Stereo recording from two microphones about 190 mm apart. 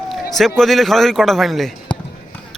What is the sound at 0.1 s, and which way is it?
A man's voice, centre (ahead or behind).